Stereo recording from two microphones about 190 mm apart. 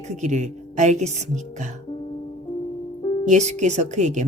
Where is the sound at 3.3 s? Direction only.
35° right (ahead or behind).